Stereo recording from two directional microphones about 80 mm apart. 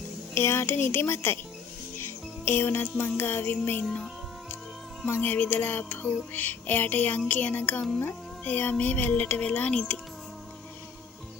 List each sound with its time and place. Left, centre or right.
0.3 s speech: left
2.0 s music: left
5.0 s music: left
8.0 s speech: left
8.8 s music: left